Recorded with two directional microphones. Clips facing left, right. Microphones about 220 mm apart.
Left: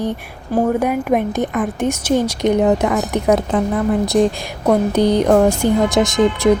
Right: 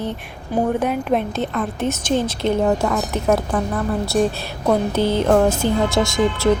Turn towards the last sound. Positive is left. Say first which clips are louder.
# left 4 dB
turn(degrees=20)  # may be behind; listen again after turning